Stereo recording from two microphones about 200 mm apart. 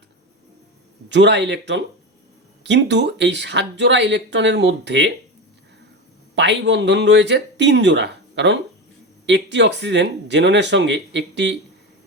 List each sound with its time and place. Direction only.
1.1 s speech: 60° right (ahead or behind)
6.3 s speech: 60° right (ahead or behind)